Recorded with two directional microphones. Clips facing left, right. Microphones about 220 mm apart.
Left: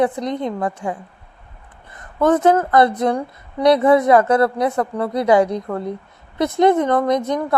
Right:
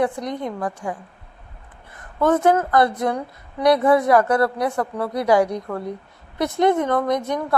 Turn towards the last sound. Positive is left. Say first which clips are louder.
# left 3 dB
turn(degrees=20)  # may be behind; listen again after turning